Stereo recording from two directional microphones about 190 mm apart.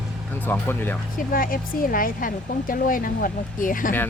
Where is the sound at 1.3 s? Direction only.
45° left (ahead or behind).